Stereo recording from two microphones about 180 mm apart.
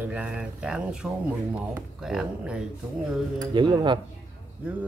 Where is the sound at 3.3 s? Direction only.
25° right (ahead or behind).